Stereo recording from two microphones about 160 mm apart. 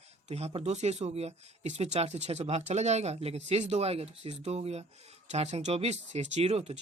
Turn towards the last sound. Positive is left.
turn(degrees=-40)  # may be behind; listen again after turning